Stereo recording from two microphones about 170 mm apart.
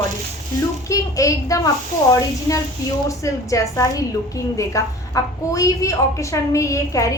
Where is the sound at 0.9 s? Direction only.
20° left (ahead or behind).